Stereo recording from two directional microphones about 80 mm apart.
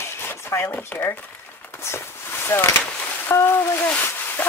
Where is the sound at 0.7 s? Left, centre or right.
Left.